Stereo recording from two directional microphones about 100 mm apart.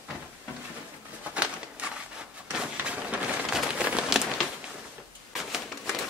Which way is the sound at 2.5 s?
10° right (ahead or behind).